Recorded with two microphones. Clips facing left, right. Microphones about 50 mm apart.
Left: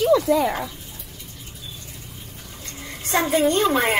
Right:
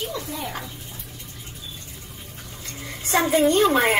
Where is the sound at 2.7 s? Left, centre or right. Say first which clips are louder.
Even; centre.